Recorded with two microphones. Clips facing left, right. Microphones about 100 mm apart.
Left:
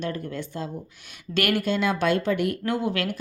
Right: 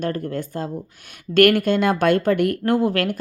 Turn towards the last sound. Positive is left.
turn(degrees=-50)  # may be behind; listen again after turning